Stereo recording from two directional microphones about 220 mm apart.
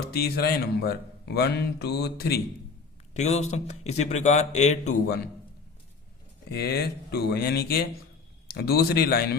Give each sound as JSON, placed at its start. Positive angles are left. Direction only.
{"t": 0.2, "sound": "speech", "side_deg": 45}
{"t": 3.2, "sound": "a man's voice", "side_deg": 30}
{"t": 6.5, "sound": "speech", "side_deg": 45}